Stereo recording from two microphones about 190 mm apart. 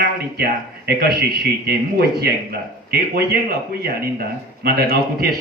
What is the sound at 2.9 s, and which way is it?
Speech, 55° right (ahead or behind).